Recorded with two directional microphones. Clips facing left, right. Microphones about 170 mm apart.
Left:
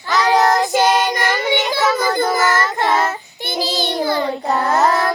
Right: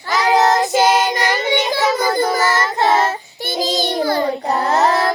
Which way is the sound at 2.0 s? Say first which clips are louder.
Right 1 dB; 35° right (ahead or behind).